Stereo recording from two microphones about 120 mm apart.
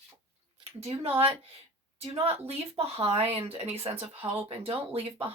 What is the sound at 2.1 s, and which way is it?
Speech, 55° right (ahead or behind).